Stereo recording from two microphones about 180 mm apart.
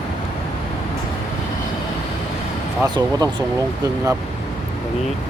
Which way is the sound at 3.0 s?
20° right (ahead or behind).